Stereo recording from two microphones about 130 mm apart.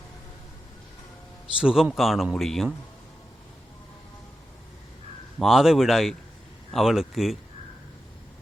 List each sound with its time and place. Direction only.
1.5 s speech: 5° right (ahead or behind)
5.4 s speech: centre (ahead or behind)